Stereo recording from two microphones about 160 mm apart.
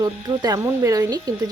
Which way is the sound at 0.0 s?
20° right (ahead or behind).